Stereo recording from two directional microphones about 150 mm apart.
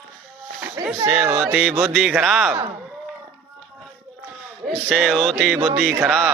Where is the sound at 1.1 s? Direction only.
10° right (ahead or behind).